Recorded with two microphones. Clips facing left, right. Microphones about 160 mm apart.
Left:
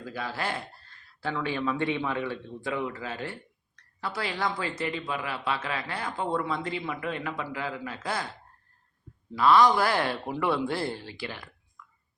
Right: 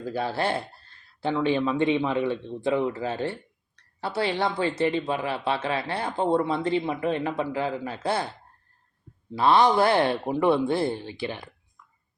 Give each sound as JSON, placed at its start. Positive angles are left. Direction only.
{"t": 0.0, "sound": "a woman's voice", "side_deg": -30}
{"t": 9.3, "sound": "speech", "side_deg": -30}